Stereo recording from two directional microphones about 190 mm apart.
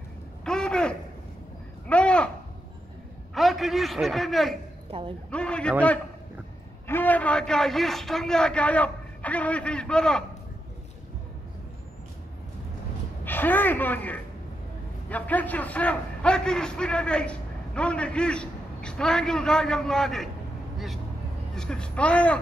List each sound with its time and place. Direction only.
0.5 s a sound: 5° left (ahead or behind)
3.3 s a man's voice: centre (ahead or behind)
4.9 s a man's voice: 30° right (ahead or behind)
5.3 s a man's voice: 5° left (ahead or behind)
13.2 s a woman's voice: 10° left (ahead or behind)